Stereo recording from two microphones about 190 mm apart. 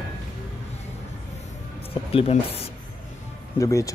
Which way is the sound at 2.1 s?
35° left (ahead or behind).